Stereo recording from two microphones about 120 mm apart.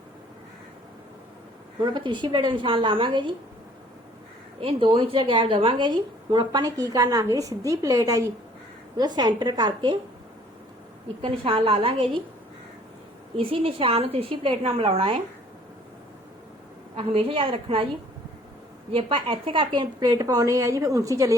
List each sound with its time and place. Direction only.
1.8 s a woman's voice: 40° right (ahead or behind)
4.6 s a woman's voice: 50° right (ahead or behind)
11.2 s a woman's voice: 50° right (ahead or behind)
13.3 s a woman's voice: 50° right (ahead or behind)
16.9 s a woman's voice: 50° right (ahead or behind)
18.9 s a woman's voice: 45° right (ahead or behind); by 21.3 s 25° right (ahead or behind)